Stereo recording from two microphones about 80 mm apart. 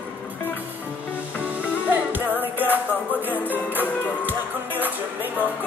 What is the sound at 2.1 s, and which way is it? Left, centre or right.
Music, right.